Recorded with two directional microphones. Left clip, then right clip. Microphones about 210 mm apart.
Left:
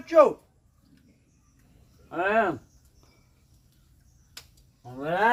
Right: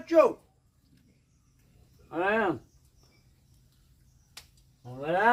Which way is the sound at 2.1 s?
10° right (ahead or behind).